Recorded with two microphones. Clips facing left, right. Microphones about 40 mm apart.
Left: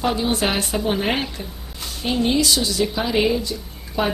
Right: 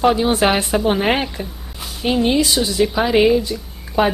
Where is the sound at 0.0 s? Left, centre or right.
Right.